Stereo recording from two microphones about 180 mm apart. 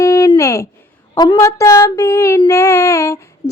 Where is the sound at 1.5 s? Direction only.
15° left (ahead or behind).